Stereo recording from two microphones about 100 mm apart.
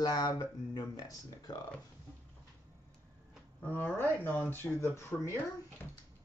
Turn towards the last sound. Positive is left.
turn(degrees=25)  # may be behind; listen again after turning